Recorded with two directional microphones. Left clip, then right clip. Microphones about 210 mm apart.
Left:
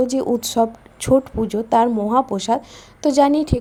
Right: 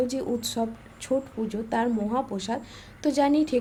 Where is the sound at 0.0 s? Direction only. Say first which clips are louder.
Left 8 dB; 25° left (ahead or behind).